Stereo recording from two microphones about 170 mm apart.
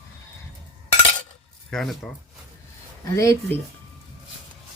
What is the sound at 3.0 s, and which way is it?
Speech, 20° left (ahead or behind).